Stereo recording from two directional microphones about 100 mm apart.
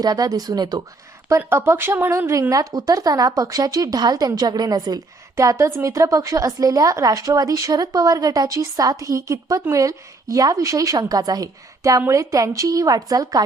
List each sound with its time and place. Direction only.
0.0 s a woman's voice: 40° right (ahead or behind)
1.3 s a woman's voice: 25° right (ahead or behind); by 13.4 s 40° right (ahead or behind)